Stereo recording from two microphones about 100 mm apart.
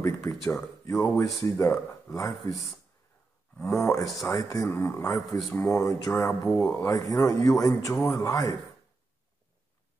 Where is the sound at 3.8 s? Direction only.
35° left (ahead or behind).